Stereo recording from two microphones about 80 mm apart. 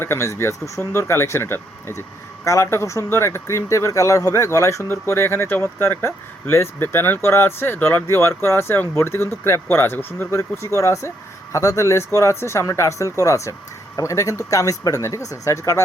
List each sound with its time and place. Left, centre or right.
0.0 s speech: left
2.4 s speech: left